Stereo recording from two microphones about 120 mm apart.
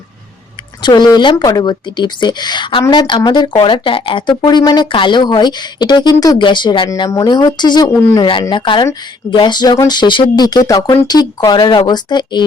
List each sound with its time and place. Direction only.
0.8 s speech: 40° left (ahead or behind)